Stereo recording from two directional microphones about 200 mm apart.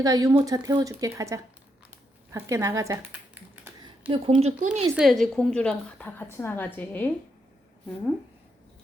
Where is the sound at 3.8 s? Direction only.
25° right (ahead or behind).